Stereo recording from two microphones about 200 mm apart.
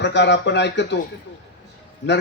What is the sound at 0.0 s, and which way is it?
Speech, 60° left (ahead or behind).